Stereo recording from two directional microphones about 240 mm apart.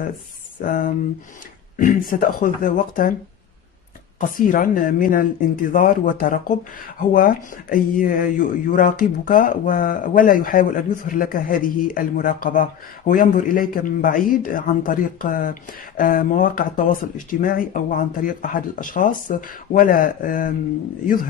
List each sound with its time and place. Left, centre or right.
0.6 s speech: left
4.2 s speech: left